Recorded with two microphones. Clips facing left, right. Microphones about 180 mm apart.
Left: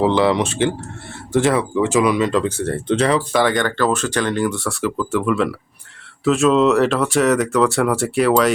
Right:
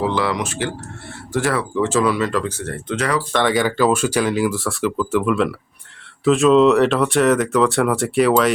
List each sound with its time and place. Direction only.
0.0 s speech: 25° left (ahead or behind)
3.3 s speech: centre (ahead or behind)